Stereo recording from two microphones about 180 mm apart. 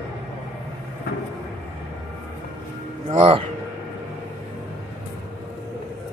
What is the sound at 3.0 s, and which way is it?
Speech, 30° right (ahead or behind).